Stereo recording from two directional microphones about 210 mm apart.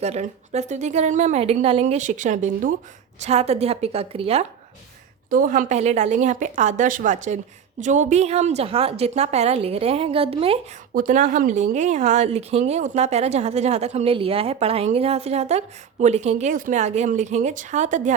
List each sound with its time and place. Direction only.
0.0 s a woman's voice: 30° right (ahead or behind)
5.3 s a woman's voice: 40° right (ahead or behind)
10.9 s a woman's voice: 40° right (ahead or behind)